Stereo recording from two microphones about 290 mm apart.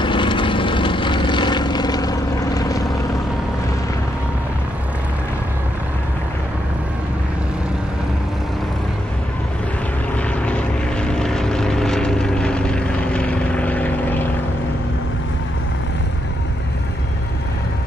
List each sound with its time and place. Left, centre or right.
0.0 s vehicle: centre
10.4 s vehicle: centre